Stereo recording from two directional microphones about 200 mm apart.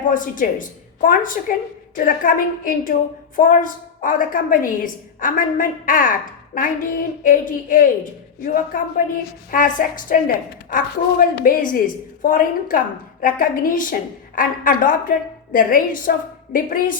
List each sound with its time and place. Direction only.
0.1 s a woman's voice: 40° left (ahead or behind)